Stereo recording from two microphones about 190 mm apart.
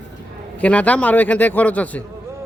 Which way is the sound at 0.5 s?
5° left (ahead or behind).